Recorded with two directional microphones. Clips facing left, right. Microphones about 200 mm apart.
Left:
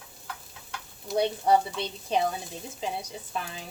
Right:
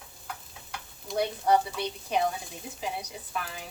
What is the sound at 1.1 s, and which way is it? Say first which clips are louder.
Speech: left 2 dB; 25° left (ahead or behind).